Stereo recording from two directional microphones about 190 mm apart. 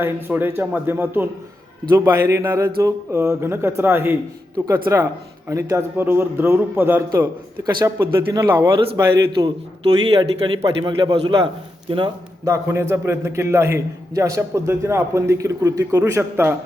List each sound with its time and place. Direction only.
0.0 s a man's voice: 10° right (ahead or behind)
10.1 s a man's voice: 25° right (ahead or behind)